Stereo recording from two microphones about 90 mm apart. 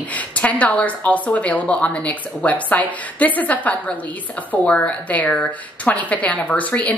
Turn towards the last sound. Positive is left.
turn(degrees=15)  # may be behind; listen again after turning